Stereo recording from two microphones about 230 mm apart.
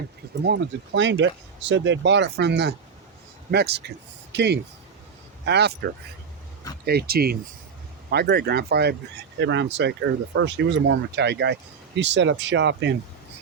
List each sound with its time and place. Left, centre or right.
0.4 s speech: right